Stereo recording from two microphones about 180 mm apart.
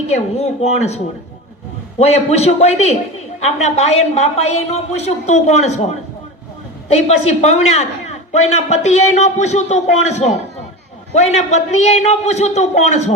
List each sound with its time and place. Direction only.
0.1 s a woman's voice: 35° left (ahead or behind)
7.1 s a woman's voice: 40° left (ahead or behind)